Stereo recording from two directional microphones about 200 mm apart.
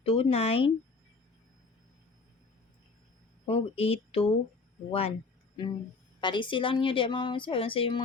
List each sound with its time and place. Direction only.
0.0 s a woman's voice: 30° left (ahead or behind)
3.4 s a woman's voice: 30° left (ahead or behind)
6.1 s a woman's voice: 25° left (ahead or behind)